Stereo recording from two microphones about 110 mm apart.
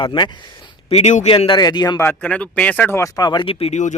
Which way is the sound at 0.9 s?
90° left.